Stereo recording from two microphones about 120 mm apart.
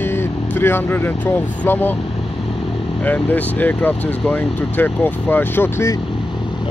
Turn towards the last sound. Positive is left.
turn(degrees=15)  # may be behind; listen again after turning